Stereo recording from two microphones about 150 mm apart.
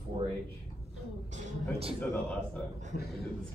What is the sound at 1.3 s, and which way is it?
Speech, 55° right (ahead or behind).